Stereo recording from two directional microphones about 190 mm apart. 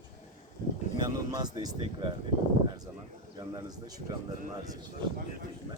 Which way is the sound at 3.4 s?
20° right (ahead or behind).